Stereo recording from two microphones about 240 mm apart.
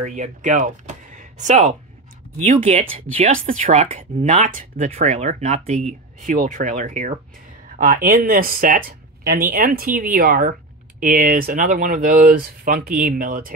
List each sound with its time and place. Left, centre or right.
0.0 s speech: right